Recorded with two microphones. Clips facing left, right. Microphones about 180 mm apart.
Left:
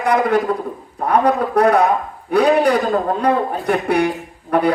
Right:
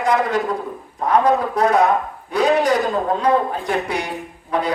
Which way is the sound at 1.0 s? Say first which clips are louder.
Left 1 dB; 60° left (ahead or behind).